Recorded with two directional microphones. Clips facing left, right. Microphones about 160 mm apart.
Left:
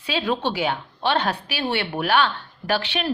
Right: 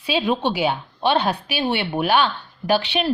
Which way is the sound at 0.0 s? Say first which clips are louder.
Right 3 dB; 15° right (ahead or behind).